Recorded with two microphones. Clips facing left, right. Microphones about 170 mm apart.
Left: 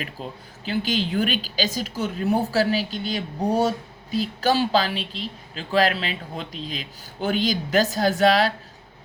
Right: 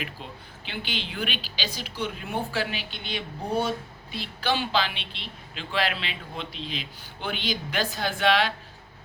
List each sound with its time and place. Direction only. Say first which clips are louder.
0.0 s a woman's voice: left 4 dB; 40° left (ahead or behind)